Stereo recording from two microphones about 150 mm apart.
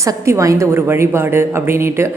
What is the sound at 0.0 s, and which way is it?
A woman's voice, 20° right (ahead or behind).